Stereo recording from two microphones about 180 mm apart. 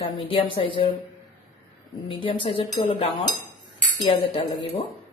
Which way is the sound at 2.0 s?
25° left (ahead or behind).